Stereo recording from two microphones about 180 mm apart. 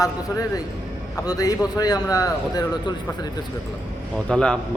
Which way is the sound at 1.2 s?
20° left (ahead or behind).